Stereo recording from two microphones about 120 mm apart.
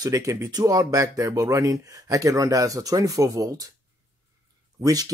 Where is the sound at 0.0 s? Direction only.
25° right (ahead or behind).